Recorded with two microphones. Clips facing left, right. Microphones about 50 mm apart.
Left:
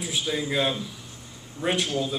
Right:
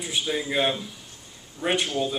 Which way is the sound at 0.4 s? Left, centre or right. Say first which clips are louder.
Right 1 dB; centre.